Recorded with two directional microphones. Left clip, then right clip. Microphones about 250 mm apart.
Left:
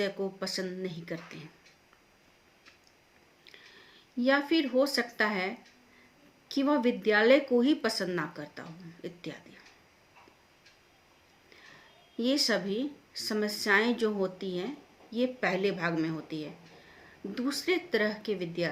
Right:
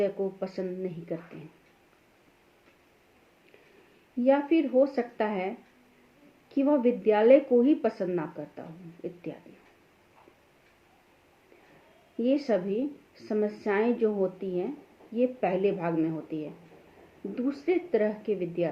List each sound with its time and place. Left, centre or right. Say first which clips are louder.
0.3 s a woman's voice: right 1 dB; left
4.2 s a woman's voice: right 3 dB; left
6.5 s a woman's voice: right 3 dB; left
12.1 s a woman's voice: right 2 dB; left